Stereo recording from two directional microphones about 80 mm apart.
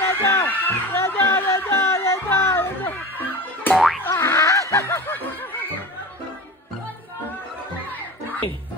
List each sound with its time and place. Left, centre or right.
0.0 s a sound: left
3.7 s boing: centre
4.1 s snicker: left